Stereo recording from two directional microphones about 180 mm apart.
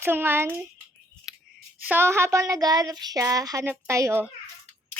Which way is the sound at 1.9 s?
10° right (ahead or behind).